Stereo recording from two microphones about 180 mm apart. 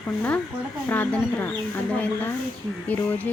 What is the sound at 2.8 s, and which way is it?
Speech, 10° left (ahead or behind).